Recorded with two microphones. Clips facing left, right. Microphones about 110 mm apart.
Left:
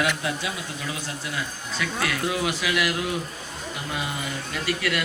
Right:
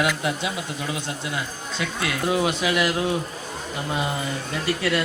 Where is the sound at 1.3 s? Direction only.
25° right (ahead or behind).